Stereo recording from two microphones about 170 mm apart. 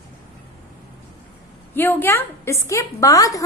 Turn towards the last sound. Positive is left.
turn(degrees=20)  # may be behind; listen again after turning